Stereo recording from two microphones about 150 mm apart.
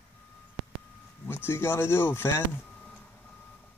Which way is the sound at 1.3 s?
15° left (ahead or behind).